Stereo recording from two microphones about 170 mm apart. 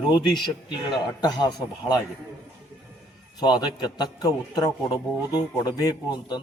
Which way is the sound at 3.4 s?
25° left (ahead or behind).